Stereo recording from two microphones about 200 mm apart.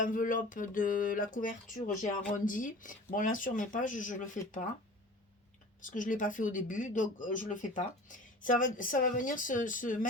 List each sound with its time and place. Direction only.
0.0 s a sound: 40° left (ahead or behind)
2.3 s speech: 40° left (ahead or behind)
5.8 s speech: 40° left (ahead or behind)